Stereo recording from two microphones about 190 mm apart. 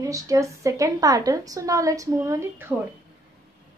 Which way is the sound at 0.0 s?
15° right (ahead or behind).